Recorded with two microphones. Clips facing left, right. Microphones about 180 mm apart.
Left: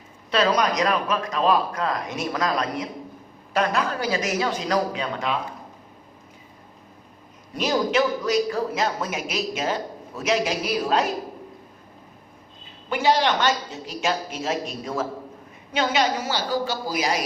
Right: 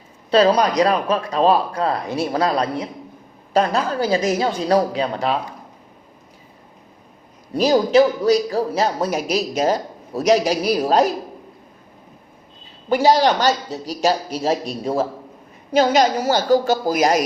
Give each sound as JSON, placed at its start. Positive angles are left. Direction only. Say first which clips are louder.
{"t": 0.3, "sound": "speech", "louder": "right 6 dB", "side_deg": -30}
{"t": 7.5, "sound": "speech", "louder": "right 8 dB", "side_deg": -35}
{"t": 12.9, "sound": "a woman's voice", "louder": "right 6 dB", "side_deg": -40}